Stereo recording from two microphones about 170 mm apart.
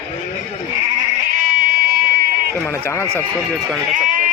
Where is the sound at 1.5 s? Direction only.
55° right (ahead or behind).